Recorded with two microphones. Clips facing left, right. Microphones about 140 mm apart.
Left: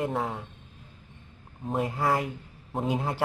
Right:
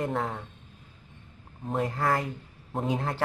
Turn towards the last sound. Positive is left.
turn(degrees=5)  # may be behind; listen again after turning